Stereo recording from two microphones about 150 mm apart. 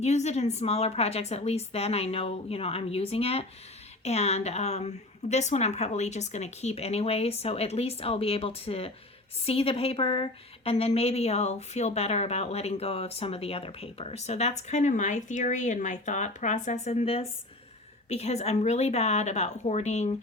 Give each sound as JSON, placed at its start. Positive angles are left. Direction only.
{"t": 0.0, "sound": "a woman's voice", "side_deg": 50}